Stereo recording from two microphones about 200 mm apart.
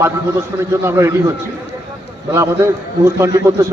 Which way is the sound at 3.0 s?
15° right (ahead or behind).